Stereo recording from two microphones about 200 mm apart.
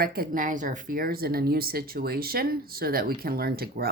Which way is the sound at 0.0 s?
50° right (ahead or behind).